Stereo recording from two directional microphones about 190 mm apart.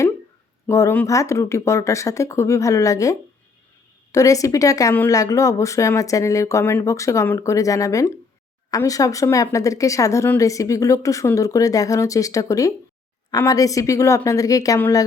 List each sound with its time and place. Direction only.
0.7 s speech: 15° left (ahead or behind)